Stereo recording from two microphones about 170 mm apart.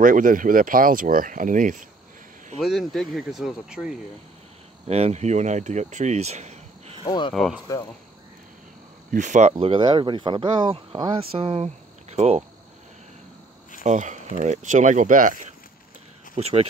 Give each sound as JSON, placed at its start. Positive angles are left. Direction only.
{"t": 0.0, "sound": "speech", "side_deg": -50}
{"t": 2.6, "sound": "speech", "side_deg": 0}
{"t": 4.8, "sound": "speech", "side_deg": -40}
{"t": 7.0, "sound": "speech", "side_deg": 30}
{"t": 7.3, "sound": "speech", "side_deg": 0}
{"t": 9.1, "sound": "speech", "side_deg": -45}
{"t": 13.8, "sound": "speech", "side_deg": -45}
{"t": 16.3, "sound": "speech", "side_deg": -40}